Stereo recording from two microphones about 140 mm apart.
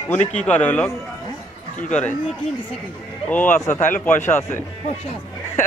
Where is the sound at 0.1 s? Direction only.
10° left (ahead or behind).